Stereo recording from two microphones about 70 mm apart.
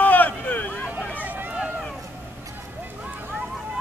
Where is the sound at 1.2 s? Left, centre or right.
Right.